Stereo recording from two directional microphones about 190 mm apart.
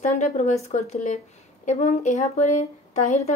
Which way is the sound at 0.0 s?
40° left (ahead or behind).